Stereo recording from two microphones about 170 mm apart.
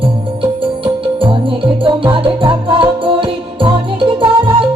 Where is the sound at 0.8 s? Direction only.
30° right (ahead or behind).